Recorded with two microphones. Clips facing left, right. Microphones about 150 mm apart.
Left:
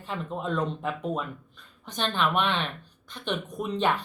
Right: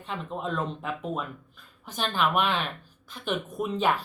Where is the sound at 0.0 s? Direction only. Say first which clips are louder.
Left 1 dB; centre (ahead or behind).